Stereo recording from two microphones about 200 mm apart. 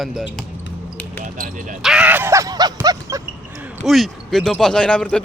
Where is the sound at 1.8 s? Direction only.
5° right (ahead or behind).